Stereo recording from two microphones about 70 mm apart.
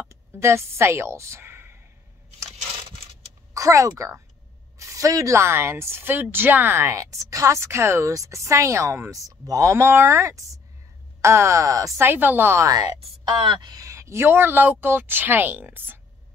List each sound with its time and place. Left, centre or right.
0.1 s a woman's voice: right
3.5 s a woman's voice: right
6.8 s a woman's voice: right
12.0 s a woman's voice: right
13.5 s speech: right
13.8 s a woman's voice: right